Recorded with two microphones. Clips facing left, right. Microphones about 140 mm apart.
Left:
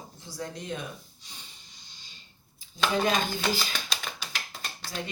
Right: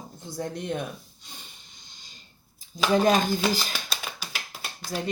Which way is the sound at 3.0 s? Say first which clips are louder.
Right 6 dB; 45° right (ahead or behind).